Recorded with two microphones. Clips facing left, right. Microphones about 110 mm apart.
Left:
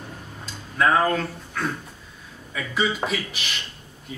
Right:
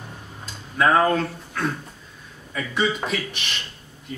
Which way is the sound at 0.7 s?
Centre (ahead or behind).